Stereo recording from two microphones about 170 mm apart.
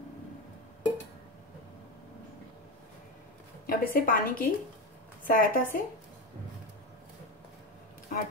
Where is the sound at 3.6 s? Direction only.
55° left (ahead or behind).